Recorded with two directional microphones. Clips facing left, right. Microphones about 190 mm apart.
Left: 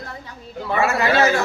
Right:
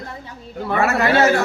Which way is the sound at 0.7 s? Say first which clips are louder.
Right 1 dB; 60° right (ahead or behind).